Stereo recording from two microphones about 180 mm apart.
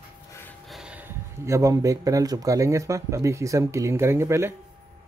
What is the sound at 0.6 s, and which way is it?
Speech, 5° right (ahead or behind).